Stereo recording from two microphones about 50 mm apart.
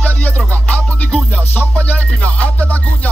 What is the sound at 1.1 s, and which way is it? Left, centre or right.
Music, right.